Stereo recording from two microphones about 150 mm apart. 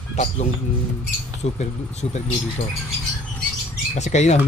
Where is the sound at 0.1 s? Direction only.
50° left (ahead or behind).